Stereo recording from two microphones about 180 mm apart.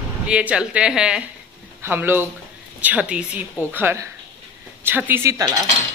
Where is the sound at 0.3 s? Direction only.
5° right (ahead or behind).